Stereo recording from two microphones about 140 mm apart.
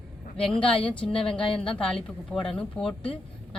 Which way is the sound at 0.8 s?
5° left (ahead or behind).